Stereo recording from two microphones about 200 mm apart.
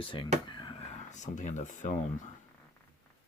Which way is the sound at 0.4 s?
25° left (ahead or behind).